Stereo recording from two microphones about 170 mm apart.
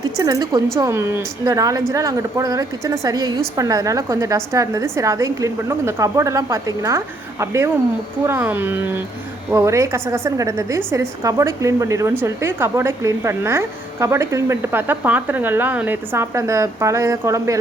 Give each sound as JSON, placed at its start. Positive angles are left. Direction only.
{"t": 0.0, "sound": "a woman's voice", "side_deg": -20}